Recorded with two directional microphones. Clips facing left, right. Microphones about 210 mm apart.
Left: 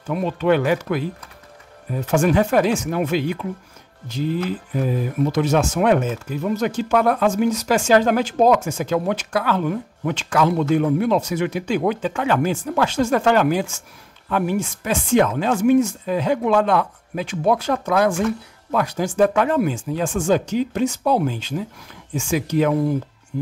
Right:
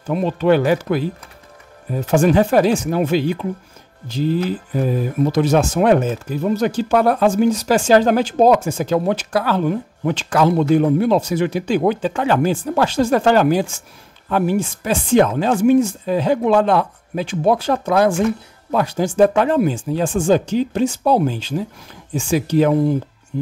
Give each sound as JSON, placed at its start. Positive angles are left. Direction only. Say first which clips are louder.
{"t": 0.0, "sound": "speech", "louder": "right 3 dB", "side_deg": -30}